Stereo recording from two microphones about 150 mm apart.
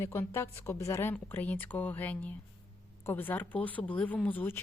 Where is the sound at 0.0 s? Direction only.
15° left (ahead or behind).